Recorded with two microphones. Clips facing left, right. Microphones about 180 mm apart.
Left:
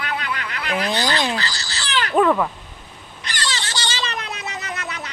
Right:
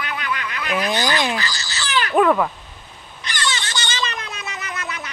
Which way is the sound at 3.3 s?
30° left (ahead or behind).